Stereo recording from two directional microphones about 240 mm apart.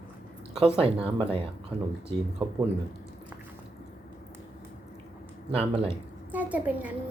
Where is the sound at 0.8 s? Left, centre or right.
Right.